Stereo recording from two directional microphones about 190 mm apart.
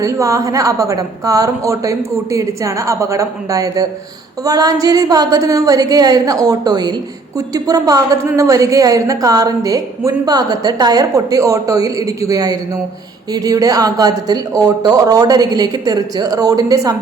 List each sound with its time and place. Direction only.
0.0 s a woman's voice: 15° right (ahead or behind)